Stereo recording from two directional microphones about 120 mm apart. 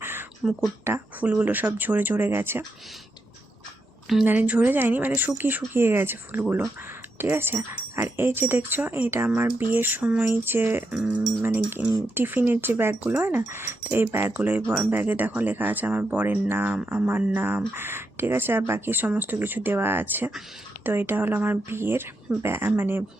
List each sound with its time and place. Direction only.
0.0 s a sound: 20° right (ahead or behind)
0.9 s speech: 20° right (ahead or behind)
4.3 s speech: 15° right (ahead or behind)
10.9 s speech: 5° right (ahead or behind)